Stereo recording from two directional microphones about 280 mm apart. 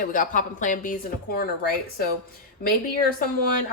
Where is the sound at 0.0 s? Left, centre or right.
Left.